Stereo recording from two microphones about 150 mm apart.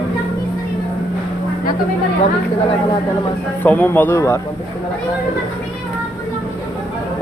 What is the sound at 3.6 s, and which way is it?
Speech, 10° left (ahead or behind).